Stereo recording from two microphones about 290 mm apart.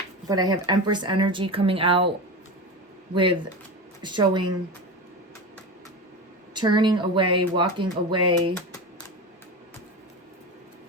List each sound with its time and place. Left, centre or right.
0.3 s speech: centre
4.0 s speech: centre
6.5 s speech: centre